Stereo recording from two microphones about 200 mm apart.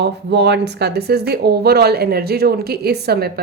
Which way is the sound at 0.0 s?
55° right (ahead or behind).